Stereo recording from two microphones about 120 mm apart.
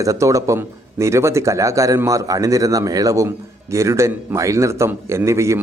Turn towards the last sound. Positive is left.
turn(degrees=-25)  # may be behind; listen again after turning